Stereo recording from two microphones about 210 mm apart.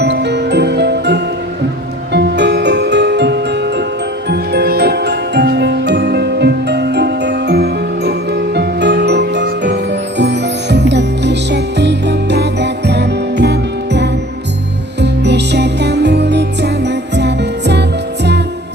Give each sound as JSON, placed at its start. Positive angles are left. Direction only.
{"t": 0.0, "sound": "music", "side_deg": -55}